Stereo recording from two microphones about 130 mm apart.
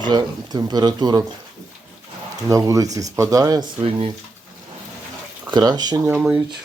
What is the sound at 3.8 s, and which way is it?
Speech, 45° right (ahead or behind).